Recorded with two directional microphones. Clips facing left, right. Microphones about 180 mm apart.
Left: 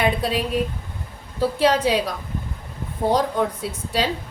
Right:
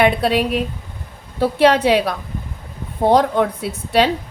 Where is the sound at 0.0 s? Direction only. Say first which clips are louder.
Right 6 dB; 70° right (ahead or behind).